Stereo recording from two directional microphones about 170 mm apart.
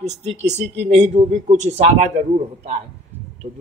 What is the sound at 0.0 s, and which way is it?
A man's voice, 40° right (ahead or behind).